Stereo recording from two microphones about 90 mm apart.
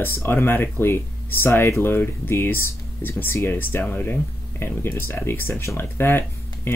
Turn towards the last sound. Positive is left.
turn(degrees=25)  # may be behind; listen again after turning